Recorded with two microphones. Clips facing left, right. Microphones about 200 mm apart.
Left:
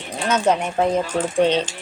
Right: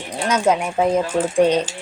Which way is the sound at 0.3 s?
10° right (ahead or behind).